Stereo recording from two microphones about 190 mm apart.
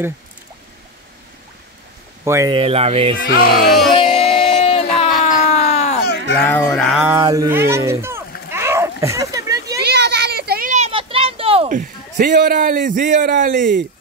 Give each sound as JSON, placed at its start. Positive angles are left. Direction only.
{"t": 2.2, "sound": "speech", "side_deg": -15}
{"t": 2.5, "sound": "speech", "side_deg": -30}
{"t": 3.2, "sound": "speech", "side_deg": 50}
{"t": 3.9, "sound": "music", "side_deg": 30}
{"t": 5.2, "sound": "a sound", "side_deg": 35}
{"t": 5.9, "sound": "a sound", "side_deg": 60}
{"t": 6.4, "sound": "a sound", "side_deg": 15}
{"t": 7.1, "sound": "speech", "side_deg": -15}
{"t": 8.5, "sound": "a sound", "side_deg": -15}
{"t": 9.8, "sound": "children playing", "side_deg": -60}
{"t": 10.7, "sound": "children playing", "side_deg": -30}
{"t": 11.7, "sound": "a man's voice", "side_deg": -45}